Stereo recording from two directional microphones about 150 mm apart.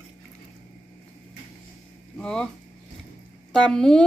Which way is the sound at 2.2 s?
5° left (ahead or behind).